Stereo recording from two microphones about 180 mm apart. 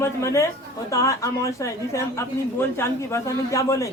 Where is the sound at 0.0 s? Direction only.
15° left (ahead or behind).